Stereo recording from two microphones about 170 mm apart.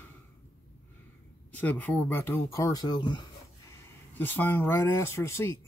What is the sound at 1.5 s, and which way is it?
Speech, 10° left (ahead or behind).